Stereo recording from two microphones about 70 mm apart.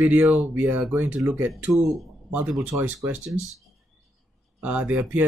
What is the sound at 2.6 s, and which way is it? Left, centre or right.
Speech, right.